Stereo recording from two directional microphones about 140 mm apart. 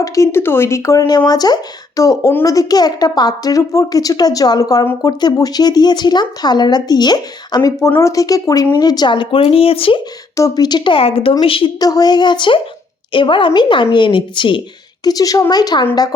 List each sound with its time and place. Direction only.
0.0 s a woman's voice: 20° left (ahead or behind); by 10.0 s 40° left (ahead or behind)
10.3 s a woman's voice: 25° left (ahead or behind)
11.8 s a woman's voice: 25° left (ahead or behind)